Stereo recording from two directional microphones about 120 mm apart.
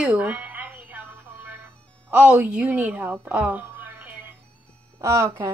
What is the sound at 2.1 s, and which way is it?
A woman's voice, 15° right (ahead or behind).